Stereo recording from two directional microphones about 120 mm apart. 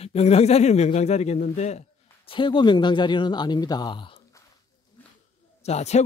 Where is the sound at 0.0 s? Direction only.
60° left (ahead or behind).